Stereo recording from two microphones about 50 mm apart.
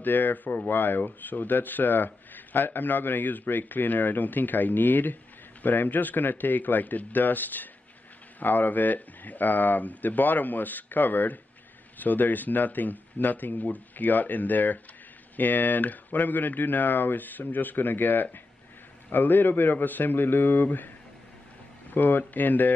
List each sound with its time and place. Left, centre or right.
0.0 s speech: left
21.9 s speech: left